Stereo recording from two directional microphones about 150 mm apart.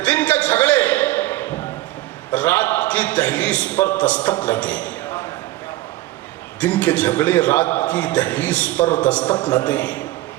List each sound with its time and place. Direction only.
0.0 s a sound: 10° left (ahead or behind)
2.3 s a man's voice: 10° left (ahead or behind)
6.6 s a man's voice: 10° left (ahead or behind)